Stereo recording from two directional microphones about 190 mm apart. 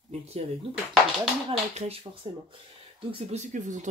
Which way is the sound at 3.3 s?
40° right (ahead or behind).